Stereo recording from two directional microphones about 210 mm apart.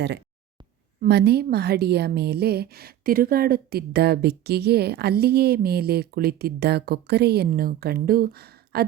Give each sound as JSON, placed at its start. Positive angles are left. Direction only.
{"t": 1.0, "sound": "a woman's voice", "side_deg": -50}